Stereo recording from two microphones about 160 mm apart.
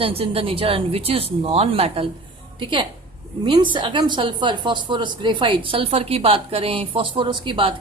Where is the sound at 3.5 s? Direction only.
30° right (ahead or behind).